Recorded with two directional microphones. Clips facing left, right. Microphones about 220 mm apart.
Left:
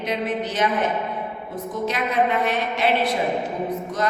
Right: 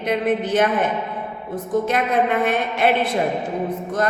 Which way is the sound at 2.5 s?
50° right (ahead or behind).